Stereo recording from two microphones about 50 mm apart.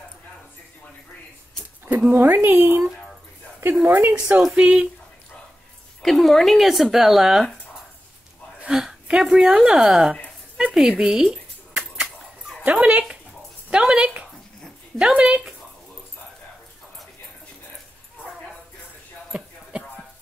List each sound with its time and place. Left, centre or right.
1.9 s speech: right
3.8 s speech: right
4.6 s speech: centre
6.0 s speech: centre
8.6 s a woman's voice: centre
10.6 s a sound: centre
10.9 s speech: centre
11.8 s chicken: centre
12.6 s speech: right
13.7 s speech: centre
19.3 s a sound: centre